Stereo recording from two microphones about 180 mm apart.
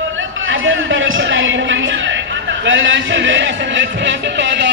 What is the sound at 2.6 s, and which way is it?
Music, 90° right.